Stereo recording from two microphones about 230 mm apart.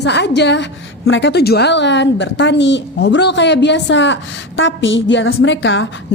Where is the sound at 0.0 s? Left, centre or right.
Left.